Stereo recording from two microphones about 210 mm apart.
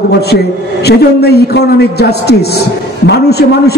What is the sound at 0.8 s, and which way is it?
A man's voice, 50° left (ahead or behind).